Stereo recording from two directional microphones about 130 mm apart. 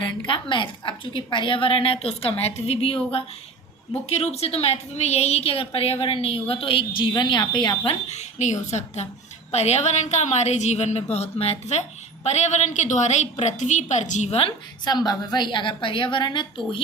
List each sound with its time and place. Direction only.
0.3 s a woman's voice: 40° left (ahead or behind)
8.0 s a woman's voice: 60° left (ahead or behind)
14.8 s a woman's voice: 30° left (ahead or behind)